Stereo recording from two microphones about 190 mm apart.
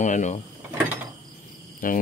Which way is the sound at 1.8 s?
45° left (ahead or behind).